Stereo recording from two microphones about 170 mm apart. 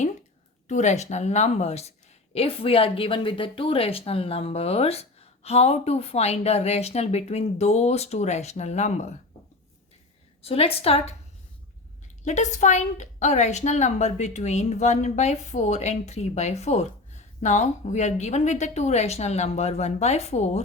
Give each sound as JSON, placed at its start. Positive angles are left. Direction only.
{"t": 0.7, "sound": "speech", "side_deg": 45}
{"t": 10.4, "sound": "speech", "side_deg": 35}
{"t": 12.2, "sound": "a woman's voice", "side_deg": 45}